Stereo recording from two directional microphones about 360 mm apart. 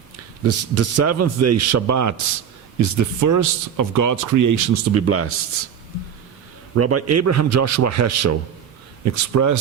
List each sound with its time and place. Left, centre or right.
0.4 s speech: right
6.7 s speech: right